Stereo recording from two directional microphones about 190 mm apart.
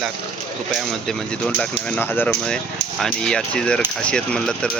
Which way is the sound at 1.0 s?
5° left (ahead or behind).